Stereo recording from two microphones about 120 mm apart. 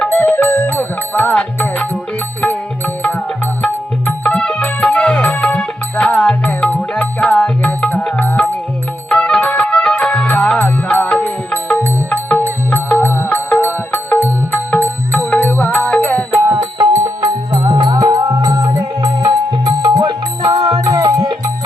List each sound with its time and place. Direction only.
0.0 s music: 15° left (ahead or behind)
13.1 s music: 20° left (ahead or behind)
17.0 s music: 30° right (ahead or behind)
17.6 s music: 40° right (ahead or behind)